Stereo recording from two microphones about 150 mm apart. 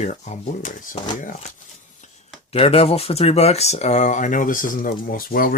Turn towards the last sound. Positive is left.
turn(degrees=70)  # may be behind; listen again after turning